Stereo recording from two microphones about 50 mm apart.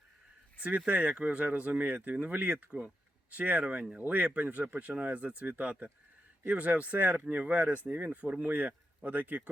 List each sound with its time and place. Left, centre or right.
0.9 s speech: right